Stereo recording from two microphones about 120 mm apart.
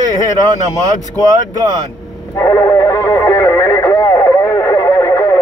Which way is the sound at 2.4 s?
25° left (ahead or behind).